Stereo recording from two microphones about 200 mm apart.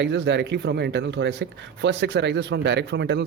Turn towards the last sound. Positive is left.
turn(degrees=-60)  # may be behind; listen again after turning